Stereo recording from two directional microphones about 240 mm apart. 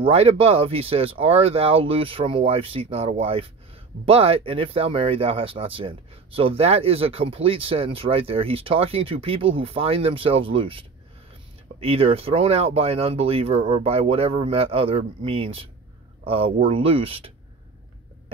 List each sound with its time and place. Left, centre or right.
0.0 s speech: right